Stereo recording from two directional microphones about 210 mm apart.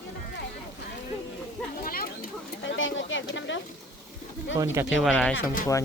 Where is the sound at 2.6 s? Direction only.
65° left (ahead or behind).